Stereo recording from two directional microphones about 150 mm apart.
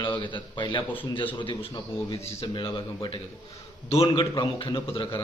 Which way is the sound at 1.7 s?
20° left (ahead or behind).